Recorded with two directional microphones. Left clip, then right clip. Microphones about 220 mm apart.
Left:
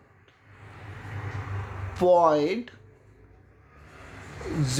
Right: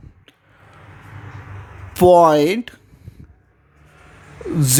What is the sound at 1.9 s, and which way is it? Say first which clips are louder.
Speech: right 9 dB; 45° right (ahead or behind).